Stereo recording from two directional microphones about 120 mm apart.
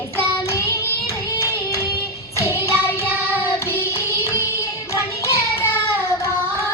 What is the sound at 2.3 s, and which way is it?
Music, 20° left (ahead or behind).